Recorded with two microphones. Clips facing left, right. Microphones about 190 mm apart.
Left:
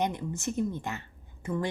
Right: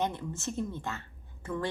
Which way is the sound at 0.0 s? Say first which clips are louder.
Left 2 dB; 15° left (ahead or behind).